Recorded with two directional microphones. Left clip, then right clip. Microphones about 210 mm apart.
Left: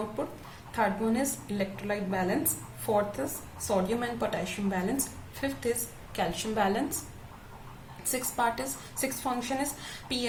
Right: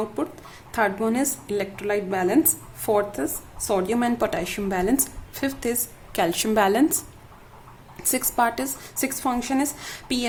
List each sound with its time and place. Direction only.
0.7 s a woman's voice: 45° right (ahead or behind)
8.1 s a woman's voice: 50° right (ahead or behind)